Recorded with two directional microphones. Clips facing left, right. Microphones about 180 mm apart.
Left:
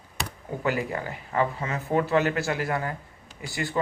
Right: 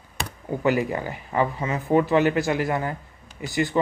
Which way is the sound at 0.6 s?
20° right (ahead or behind).